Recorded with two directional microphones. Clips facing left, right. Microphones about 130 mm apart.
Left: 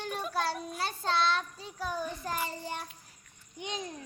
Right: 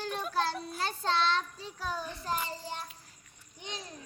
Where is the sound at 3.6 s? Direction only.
15° left (ahead or behind).